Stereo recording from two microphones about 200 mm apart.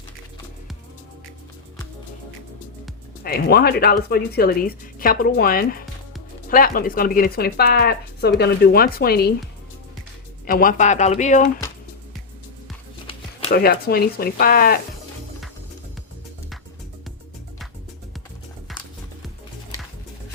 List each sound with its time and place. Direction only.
3.2 s speech: 50° left (ahead or behind)
10.4 s speech: 45° left (ahead or behind)
13.5 s speech: 50° left (ahead or behind)